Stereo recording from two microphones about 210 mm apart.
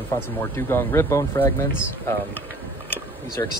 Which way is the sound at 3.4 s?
15° left (ahead or behind).